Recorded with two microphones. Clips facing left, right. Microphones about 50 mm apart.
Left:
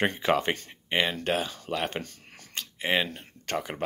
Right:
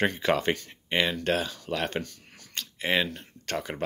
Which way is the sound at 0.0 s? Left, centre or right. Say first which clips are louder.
Even; centre.